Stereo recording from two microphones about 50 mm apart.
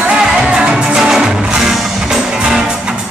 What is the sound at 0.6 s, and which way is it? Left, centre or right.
Music, centre.